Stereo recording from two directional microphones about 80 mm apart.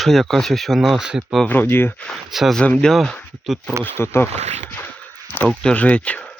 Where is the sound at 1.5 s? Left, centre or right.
Left.